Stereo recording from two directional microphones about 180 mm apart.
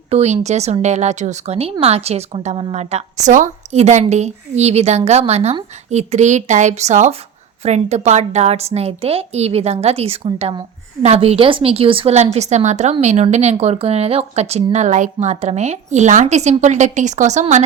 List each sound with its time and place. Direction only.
0.1 s a woman's voice: 40° right (ahead or behind)